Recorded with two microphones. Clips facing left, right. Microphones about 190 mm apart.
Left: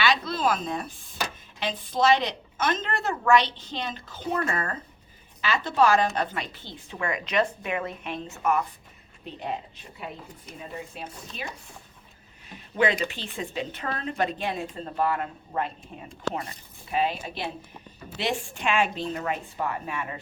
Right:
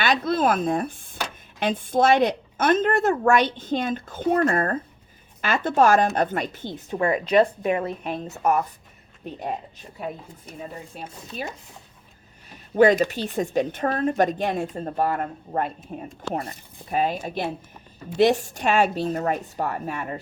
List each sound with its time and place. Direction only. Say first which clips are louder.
0.0 s speech: right 4 dB; 50° right (ahead or behind)
12.7 s a woman's voice: right 8 dB; 45° right (ahead or behind)